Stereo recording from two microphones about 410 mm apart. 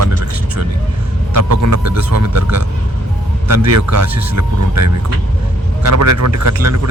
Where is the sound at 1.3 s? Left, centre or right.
Right.